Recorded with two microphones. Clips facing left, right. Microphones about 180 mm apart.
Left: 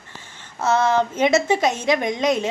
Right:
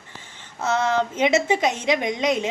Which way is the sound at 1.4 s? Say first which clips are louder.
Left 2 dB; 15° right (ahead or behind).